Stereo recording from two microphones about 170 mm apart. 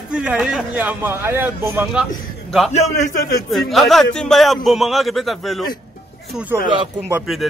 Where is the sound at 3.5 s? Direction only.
Centre (ahead or behind).